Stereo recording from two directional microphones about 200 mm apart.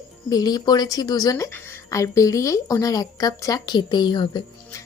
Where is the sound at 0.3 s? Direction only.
20° left (ahead or behind).